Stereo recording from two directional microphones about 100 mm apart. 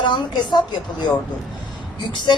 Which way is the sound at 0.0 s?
50° left (ahead or behind).